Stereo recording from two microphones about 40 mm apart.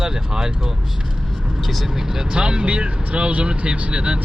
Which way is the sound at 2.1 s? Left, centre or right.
Right.